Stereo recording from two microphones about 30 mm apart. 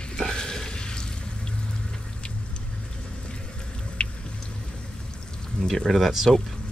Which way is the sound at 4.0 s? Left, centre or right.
Left.